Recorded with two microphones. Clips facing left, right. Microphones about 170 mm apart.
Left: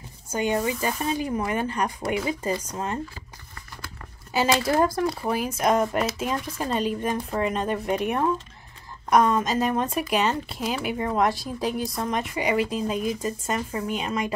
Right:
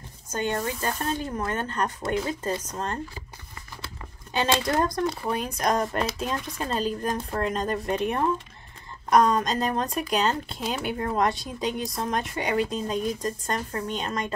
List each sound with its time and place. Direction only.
0.3 s speech: 10° left (ahead or behind)
4.3 s speech: 5° left (ahead or behind)